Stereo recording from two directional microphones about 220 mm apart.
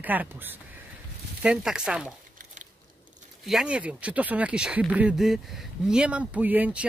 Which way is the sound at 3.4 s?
5° right (ahead or behind).